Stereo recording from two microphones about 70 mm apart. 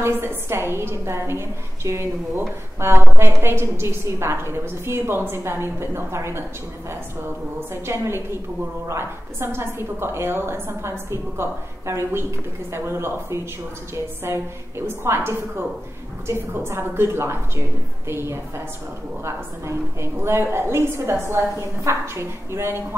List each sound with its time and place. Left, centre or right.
0.0 s a woman's voice: right
7.7 s a woman's voice: right